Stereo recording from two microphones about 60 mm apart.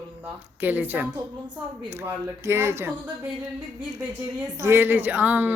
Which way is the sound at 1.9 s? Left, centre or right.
Right.